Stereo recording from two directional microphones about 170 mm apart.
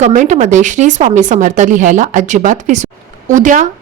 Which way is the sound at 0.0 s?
45° right (ahead or behind).